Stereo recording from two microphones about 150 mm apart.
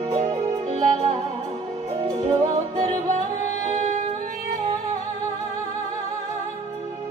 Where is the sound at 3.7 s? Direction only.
45° right (ahead or behind).